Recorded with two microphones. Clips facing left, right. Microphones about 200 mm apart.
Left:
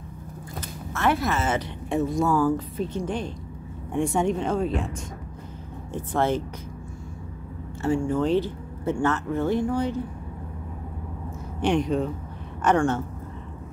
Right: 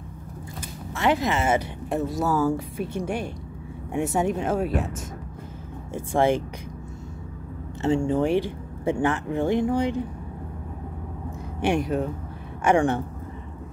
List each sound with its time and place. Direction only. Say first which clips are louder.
0.6 s music: even; 15° right (ahead or behind)
1.9 s speech: left 2 dB; 5° right (ahead or behind)
5.9 s speech: right 3 dB; 10° right (ahead or behind)
7.8 s speech: right 1 dB; 20° right (ahead or behind)
11.6 s speech: left 1 dB; 5° right (ahead or behind)